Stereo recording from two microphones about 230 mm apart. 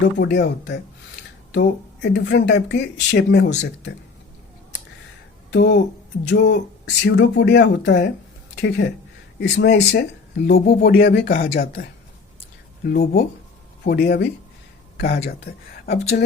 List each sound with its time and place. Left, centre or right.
0.0 s speech: left
2.0 s speech: left
5.5 s speech: left